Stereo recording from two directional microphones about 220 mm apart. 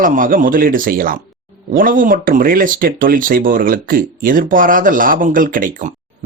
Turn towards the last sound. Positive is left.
turn(degrees=-40)  # may be behind; listen again after turning